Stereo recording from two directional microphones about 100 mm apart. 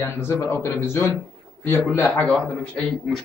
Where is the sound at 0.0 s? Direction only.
25° left (ahead or behind).